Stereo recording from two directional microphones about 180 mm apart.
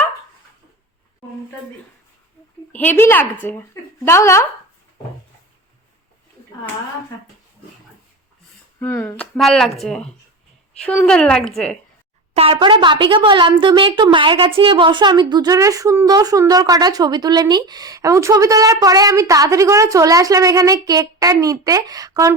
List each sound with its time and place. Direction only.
2.7 s speech: 10° left (ahead or behind)
8.8 s speech: 15° left (ahead or behind)
9.4 s a woman's voice: centre (ahead or behind)
12.3 s a woman's voice: 30° right (ahead or behind)